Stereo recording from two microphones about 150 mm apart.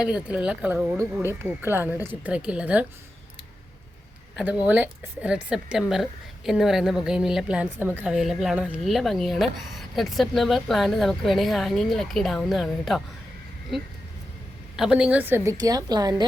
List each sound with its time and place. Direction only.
0.0 s a woman's voice: 5° right (ahead or behind)
4.4 s a woman's voice: 10° right (ahead or behind)
8.1 s speech: centre (ahead or behind)
14.8 s a woman's voice: 5° right (ahead or behind)
15.4 s a woman's voice: 25° right (ahead or behind)